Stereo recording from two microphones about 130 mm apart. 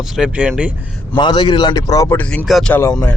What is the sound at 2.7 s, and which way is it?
Speech, 15° left (ahead or behind).